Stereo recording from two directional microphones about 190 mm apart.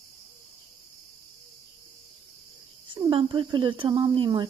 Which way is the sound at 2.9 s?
25° right (ahead or behind).